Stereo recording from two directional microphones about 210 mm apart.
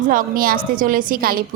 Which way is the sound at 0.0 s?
40° right (ahead or behind).